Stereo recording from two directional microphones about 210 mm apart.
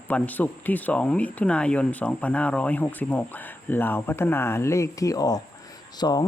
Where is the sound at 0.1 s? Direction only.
10° left (ahead or behind).